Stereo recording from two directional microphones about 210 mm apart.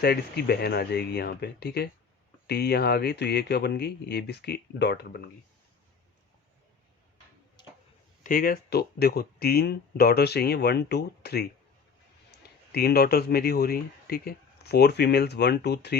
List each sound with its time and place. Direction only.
0.0 s speech: 50° left (ahead or behind)
8.2 s speech: 40° left (ahead or behind)